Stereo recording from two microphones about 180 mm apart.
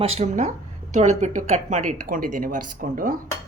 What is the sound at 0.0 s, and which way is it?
Speech, 35° right (ahead or behind).